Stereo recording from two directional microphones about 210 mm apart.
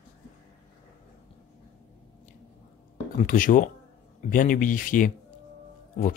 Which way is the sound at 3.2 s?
40° left (ahead or behind).